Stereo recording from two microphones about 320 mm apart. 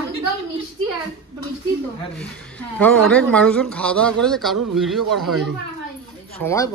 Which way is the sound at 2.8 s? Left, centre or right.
Centre.